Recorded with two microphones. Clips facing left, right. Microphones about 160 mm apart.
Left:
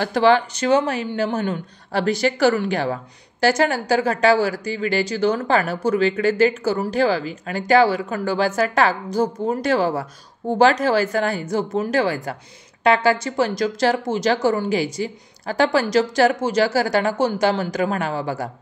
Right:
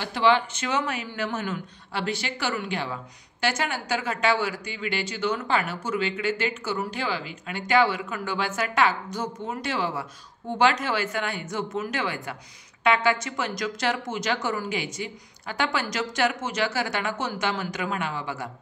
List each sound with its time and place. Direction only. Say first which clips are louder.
0.0 s speech: left 6 dB; 40° left (ahead or behind)